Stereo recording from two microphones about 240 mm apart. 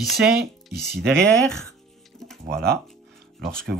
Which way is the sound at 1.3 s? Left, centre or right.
Centre.